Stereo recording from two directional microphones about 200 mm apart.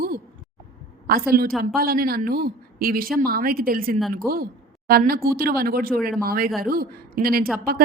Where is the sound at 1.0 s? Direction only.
50° right (ahead or behind).